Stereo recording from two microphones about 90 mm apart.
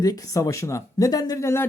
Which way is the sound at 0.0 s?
40° left (ahead or behind).